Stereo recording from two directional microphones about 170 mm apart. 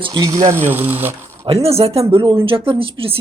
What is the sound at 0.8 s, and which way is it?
Speech, 35° right (ahead or behind).